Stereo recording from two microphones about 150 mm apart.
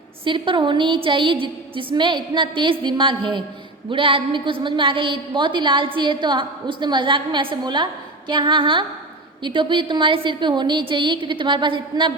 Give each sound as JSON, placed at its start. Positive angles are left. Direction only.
{"t": 0.3, "sound": "a woman's voice", "side_deg": -35}